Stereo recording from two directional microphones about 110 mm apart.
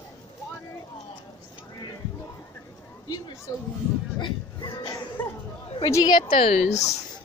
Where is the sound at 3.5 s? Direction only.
30° left (ahead or behind).